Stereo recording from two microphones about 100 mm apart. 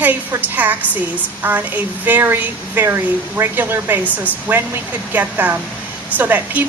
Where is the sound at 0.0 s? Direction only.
15° right (ahead or behind).